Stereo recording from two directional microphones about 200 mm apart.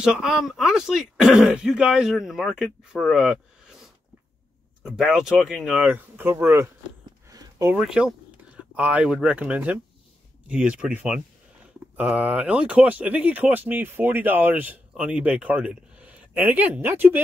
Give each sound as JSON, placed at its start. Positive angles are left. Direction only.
{"t": 0.0, "sound": "speech", "side_deg": -5}
{"t": 7.2, "sound": "a sound", "side_deg": -15}
{"t": 7.7, "sound": "speech", "side_deg": -5}